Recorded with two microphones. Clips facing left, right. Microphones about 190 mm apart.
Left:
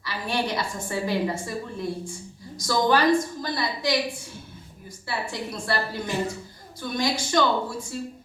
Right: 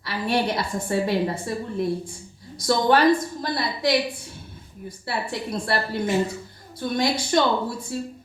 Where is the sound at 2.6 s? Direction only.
60° right (ahead or behind).